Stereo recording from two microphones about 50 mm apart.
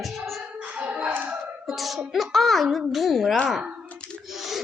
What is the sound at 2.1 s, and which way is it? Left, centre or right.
Speech, centre.